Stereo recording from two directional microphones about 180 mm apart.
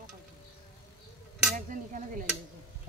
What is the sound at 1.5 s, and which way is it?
Speech, 45° right (ahead or behind).